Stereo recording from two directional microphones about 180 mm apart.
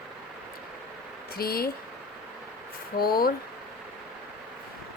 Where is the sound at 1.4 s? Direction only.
55° left (ahead or behind).